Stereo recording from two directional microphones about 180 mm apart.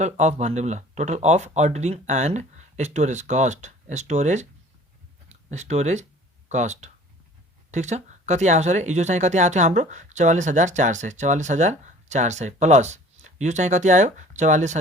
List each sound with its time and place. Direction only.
0.0 s speech: 40° right (ahead or behind)